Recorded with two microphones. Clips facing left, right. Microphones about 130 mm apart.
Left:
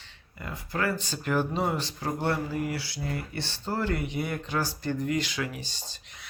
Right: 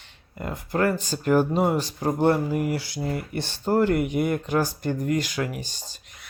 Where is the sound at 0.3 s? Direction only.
50° right (ahead or behind).